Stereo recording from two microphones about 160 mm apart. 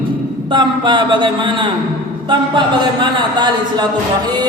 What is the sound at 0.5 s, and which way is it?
Speech, 30° right (ahead or behind).